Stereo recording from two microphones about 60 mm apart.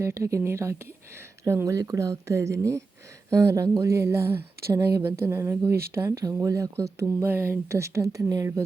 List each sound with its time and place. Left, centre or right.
0.0 s speech: right
1.6 s speech: right
7.3 s speech: right